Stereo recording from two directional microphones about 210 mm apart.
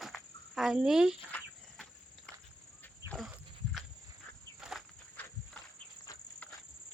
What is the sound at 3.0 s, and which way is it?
Dog, centre (ahead or behind).